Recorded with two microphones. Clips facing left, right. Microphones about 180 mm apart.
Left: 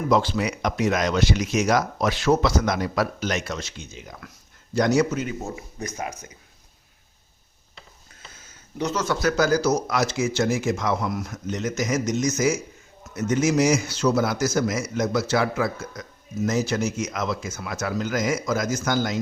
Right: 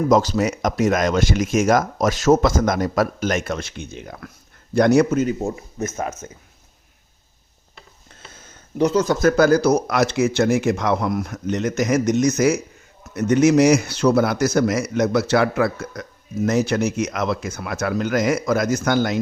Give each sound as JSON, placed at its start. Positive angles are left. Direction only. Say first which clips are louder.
{"t": 0.1, "sound": "a man's voice", "louder": "right 2 dB", "side_deg": -45}
{"t": 8.9, "sound": "a man's voice", "louder": "right 5 dB", "side_deg": -35}